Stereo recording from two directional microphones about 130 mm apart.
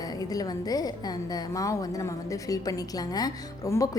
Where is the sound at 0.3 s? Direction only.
30° left (ahead or behind).